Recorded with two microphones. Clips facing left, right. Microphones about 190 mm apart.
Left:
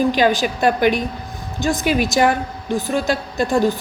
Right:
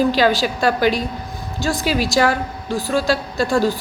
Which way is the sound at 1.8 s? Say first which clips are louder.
Left 2 dB; 55° left (ahead or behind).